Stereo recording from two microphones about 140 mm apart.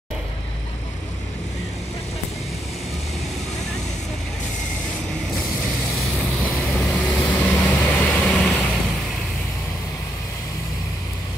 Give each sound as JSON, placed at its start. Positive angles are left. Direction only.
{"t": 6.4, "sound": "vehicle", "side_deg": 10}